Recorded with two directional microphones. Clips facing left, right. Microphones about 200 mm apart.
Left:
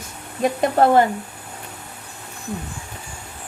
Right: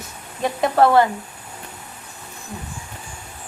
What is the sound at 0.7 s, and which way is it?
Speech, 45° left (ahead or behind).